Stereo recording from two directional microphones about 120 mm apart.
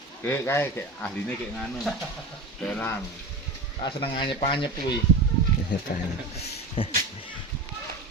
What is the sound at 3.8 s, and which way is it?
Speech, 45° left (ahead or behind).